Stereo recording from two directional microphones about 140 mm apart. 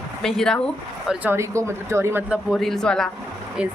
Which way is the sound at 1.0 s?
10° right (ahead or behind).